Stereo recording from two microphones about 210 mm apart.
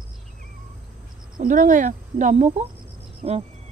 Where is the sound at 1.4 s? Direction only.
40° right (ahead or behind).